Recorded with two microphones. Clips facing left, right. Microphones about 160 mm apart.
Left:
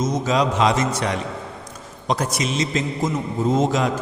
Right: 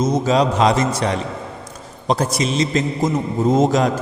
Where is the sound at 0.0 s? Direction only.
30° right (ahead or behind).